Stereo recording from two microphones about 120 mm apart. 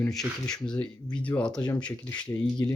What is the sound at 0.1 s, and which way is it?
Speech, 5° left (ahead or behind).